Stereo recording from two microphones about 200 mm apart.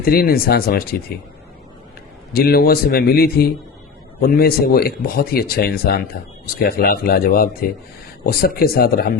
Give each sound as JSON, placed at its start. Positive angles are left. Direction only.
{"t": 0.0, "sound": "speech", "side_deg": 50}
{"t": 2.3, "sound": "speech", "side_deg": 50}